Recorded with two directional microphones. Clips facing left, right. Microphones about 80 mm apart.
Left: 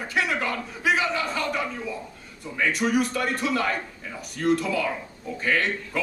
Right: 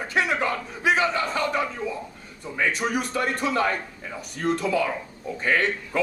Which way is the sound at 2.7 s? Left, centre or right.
Centre.